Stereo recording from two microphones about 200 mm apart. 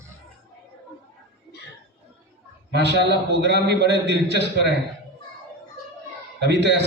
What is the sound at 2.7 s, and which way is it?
A man's voice, 60° right (ahead or behind).